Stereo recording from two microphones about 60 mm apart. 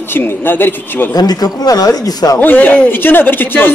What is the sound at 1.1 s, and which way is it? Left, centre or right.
Speech, left.